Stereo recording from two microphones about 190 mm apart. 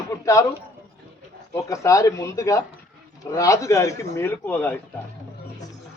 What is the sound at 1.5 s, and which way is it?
Speech, 15° left (ahead or behind).